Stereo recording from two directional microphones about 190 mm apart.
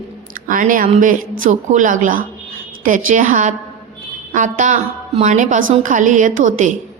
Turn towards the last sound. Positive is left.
turn(degrees=-40)  # may be behind; listen again after turning